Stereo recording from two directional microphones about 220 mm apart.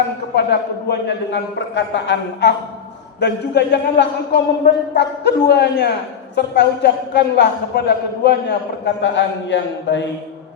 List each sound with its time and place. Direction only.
0.3 s a man's voice: 50° left (ahead or behind)